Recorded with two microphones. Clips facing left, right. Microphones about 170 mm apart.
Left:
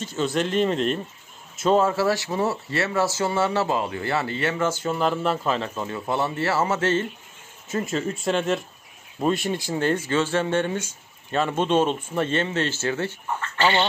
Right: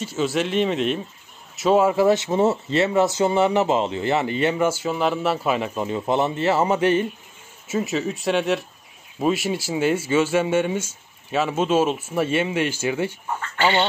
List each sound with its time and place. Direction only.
0.0 s speech: 5° right (ahead or behind)